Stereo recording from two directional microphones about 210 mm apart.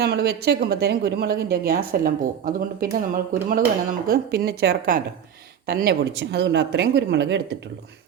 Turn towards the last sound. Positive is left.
turn(degrees=-55)  # may be behind; listen again after turning